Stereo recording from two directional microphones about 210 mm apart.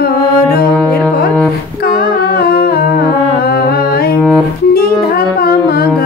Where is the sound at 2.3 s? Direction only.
45° left (ahead or behind).